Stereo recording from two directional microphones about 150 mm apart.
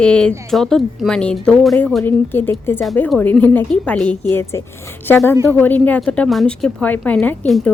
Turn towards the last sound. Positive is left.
turn(degrees=0)  # may be behind; listen again after turning